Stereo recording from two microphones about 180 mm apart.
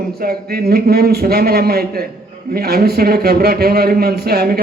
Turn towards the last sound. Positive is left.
turn(degrees=-60)  # may be behind; listen again after turning